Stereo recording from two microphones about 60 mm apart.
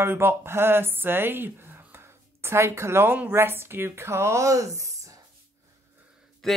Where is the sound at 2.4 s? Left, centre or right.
Right.